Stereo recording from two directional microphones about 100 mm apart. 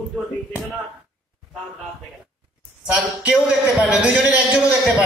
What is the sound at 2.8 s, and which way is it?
A man's voice, 5° right (ahead or behind).